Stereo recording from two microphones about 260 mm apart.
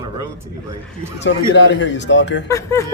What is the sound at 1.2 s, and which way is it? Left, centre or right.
Speech, left.